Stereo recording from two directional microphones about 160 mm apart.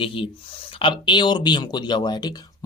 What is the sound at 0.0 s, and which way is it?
Speech, 35° left (ahead or behind).